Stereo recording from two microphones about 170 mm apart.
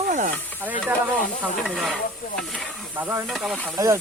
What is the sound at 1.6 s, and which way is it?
Hiss, centre (ahead or behind).